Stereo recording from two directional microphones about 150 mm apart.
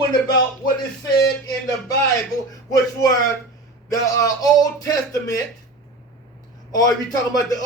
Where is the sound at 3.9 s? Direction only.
25° left (ahead or behind).